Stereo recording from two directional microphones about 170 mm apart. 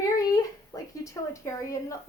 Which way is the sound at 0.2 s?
20° left (ahead or behind).